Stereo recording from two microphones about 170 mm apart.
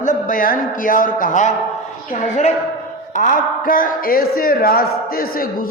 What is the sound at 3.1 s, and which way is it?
A man's voice, 50° left (ahead or behind).